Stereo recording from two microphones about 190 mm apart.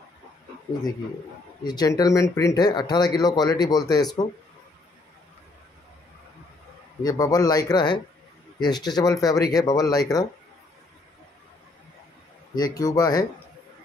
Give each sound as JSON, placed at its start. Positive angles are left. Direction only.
{"t": 1.6, "sound": "speech", "side_deg": 20}
{"t": 7.0, "sound": "speech", "side_deg": 20}
{"t": 12.5, "sound": "speech", "side_deg": 20}